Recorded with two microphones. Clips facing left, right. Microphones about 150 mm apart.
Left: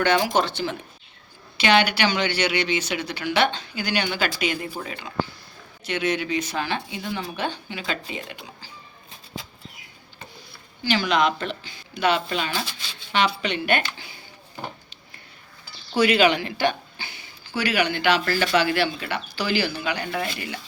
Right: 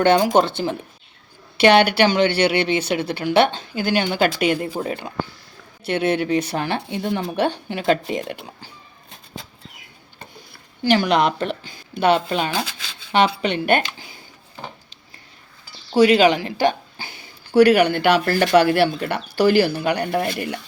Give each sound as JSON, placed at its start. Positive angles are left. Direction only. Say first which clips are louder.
{"t": 0.4, "sound": "speech", "louder": "right 4 dB", "side_deg": -50}
{"t": 10.8, "sound": "speech", "louder": "right 4 dB", "side_deg": -60}
{"t": 16.0, "sound": "speech", "louder": "right 5 dB", "side_deg": -40}
{"t": 17.5, "sound": "speech", "louder": "right 11 dB", "side_deg": -60}